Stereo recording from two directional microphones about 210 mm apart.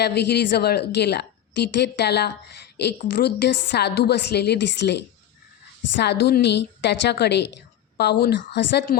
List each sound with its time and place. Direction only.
0.0 s a woman's voice: 50° left (ahead or behind)
6.0 s a woman's voice: 55° left (ahead or behind)